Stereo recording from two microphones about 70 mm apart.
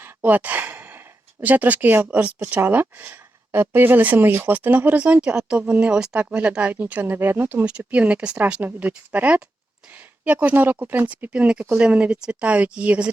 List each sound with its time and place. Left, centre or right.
0.0 s speech: right
10.4 s speech: right